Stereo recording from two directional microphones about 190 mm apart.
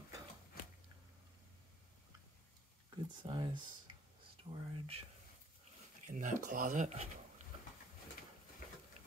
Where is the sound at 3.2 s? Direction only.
25° right (ahead or behind).